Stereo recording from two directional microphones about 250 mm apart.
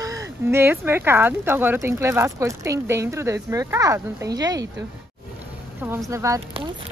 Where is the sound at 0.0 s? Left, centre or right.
Centre.